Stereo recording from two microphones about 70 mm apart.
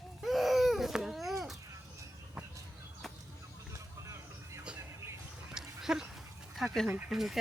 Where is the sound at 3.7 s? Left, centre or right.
Right.